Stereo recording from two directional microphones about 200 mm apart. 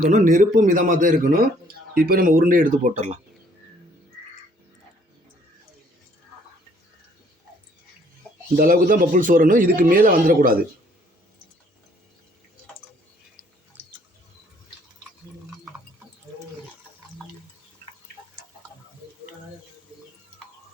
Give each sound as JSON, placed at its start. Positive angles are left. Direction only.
{"t": 0.0, "sound": "a man's voice", "side_deg": -40}
{"t": 8.5, "sound": "a man's voice", "side_deg": -45}